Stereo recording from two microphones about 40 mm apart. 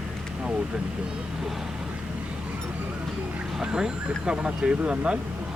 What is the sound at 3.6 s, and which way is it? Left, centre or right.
Speech, centre.